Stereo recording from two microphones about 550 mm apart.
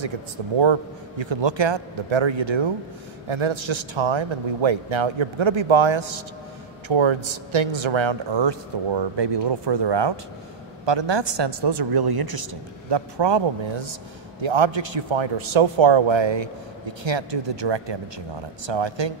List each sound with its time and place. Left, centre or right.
0.6 s a man's voice: right